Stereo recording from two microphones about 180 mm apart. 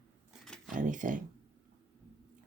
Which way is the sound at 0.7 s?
45° right (ahead or behind).